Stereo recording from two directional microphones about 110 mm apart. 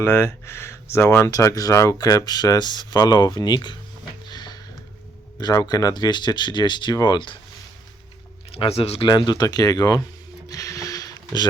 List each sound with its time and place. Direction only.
0.0 s speech: 25° left (ahead or behind); by 3.8 s 40° left (ahead or behind)
4.3 s a sound: 40° left (ahead or behind)
5.4 s speech: 40° left (ahead or behind)
8.5 s speech: 60° left (ahead or behind)
9.0 s speech: 40° left (ahead or behind)
10.5 s a sound: 30° left (ahead or behind)